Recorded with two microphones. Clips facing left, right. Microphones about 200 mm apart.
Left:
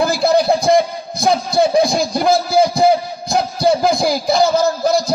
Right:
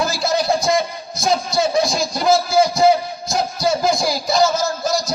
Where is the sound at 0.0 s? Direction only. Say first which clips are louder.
Left 6 dB; 60° left (ahead or behind).